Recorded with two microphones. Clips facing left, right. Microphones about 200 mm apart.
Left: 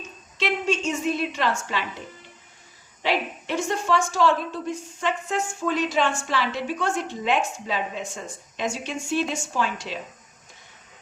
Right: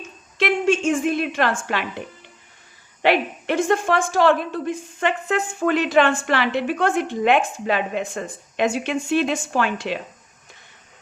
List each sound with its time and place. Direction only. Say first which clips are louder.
0.3 s a woman's voice: right 6 dB; 50° right (ahead or behind)